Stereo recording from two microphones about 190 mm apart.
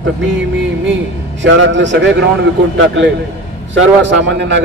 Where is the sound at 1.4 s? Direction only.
70° right (ahead or behind).